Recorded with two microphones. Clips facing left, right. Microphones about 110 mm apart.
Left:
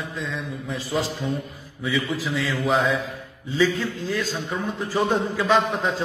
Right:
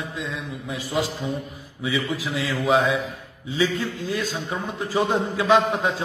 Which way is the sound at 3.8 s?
15° right (ahead or behind).